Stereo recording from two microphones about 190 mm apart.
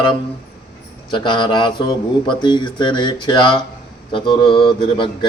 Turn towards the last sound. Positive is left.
turn(degrees=25)  # may be behind; listen again after turning